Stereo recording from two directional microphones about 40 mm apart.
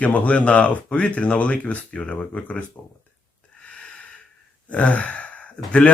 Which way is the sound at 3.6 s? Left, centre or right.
Left.